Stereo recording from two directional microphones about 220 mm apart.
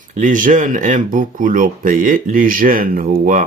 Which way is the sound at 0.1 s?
35° right (ahead or behind).